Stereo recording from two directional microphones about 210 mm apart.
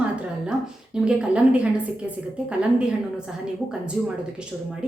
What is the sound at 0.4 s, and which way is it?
A woman's voice, 5° right (ahead or behind).